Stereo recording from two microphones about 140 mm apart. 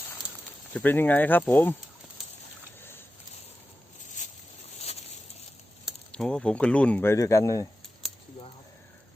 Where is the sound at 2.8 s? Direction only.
15° left (ahead or behind).